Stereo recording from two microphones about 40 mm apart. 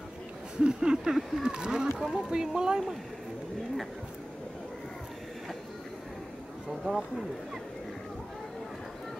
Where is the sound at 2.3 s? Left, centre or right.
Centre.